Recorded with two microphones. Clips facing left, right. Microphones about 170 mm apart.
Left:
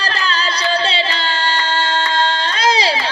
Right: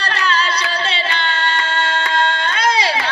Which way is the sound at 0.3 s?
30° left (ahead or behind).